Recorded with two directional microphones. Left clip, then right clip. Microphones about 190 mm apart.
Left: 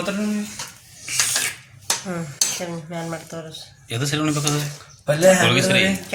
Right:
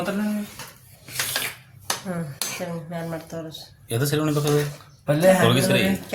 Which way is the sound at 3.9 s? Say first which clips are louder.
Even; 35° right (ahead or behind).